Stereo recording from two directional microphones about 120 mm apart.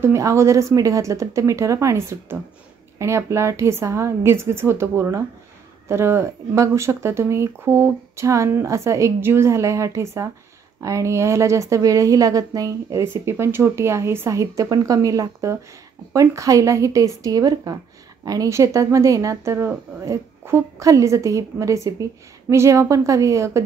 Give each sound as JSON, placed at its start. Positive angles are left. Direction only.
{"t": 0.0, "sound": "a woman's voice", "side_deg": -25}